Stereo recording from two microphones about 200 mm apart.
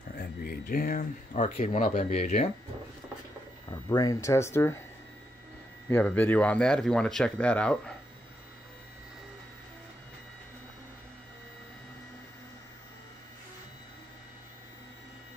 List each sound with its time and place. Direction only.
0.1 s speech: 45° left (ahead or behind); by 2.5 s 30° left (ahead or behind)
3.7 s speech: 20° left (ahead or behind)
5.9 s speech: 10° left (ahead or behind)